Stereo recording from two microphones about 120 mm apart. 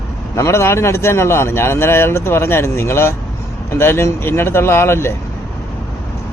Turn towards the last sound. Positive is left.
turn(degrees=20)  # may be behind; listen again after turning